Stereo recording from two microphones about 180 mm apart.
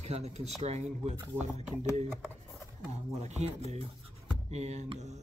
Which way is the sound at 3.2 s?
40° right (ahead or behind).